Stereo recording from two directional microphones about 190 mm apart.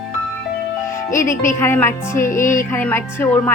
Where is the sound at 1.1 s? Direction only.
15° left (ahead or behind).